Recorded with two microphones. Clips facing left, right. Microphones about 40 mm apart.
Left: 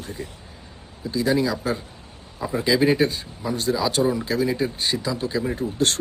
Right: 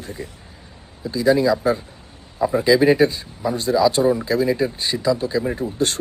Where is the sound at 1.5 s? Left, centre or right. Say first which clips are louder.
Right 7 dB; right.